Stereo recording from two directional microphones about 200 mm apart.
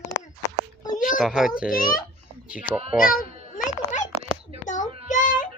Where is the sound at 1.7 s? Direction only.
45° left (ahead or behind).